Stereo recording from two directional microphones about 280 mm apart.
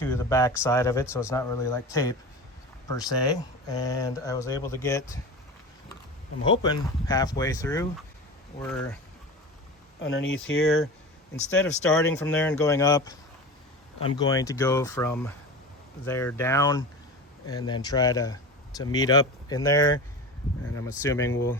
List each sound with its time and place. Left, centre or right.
0.0 s speech: centre
6.4 s speech: centre
10.0 s speech: left
11.5 s speech: centre
14.2 s speech: centre
21.0 s speech: centre